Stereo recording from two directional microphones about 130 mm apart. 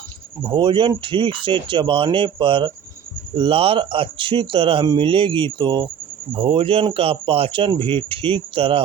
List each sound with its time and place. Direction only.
0.4 s speech: 35° right (ahead or behind)